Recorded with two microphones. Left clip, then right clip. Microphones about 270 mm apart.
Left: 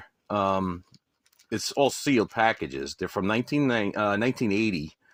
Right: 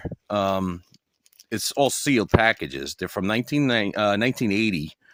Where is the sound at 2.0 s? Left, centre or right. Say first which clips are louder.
Right 3 dB; right.